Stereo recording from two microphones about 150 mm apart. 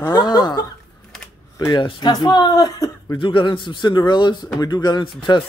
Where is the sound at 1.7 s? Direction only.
30° left (ahead or behind).